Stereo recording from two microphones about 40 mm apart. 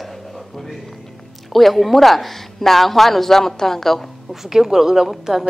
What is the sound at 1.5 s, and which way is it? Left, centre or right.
Speech, centre.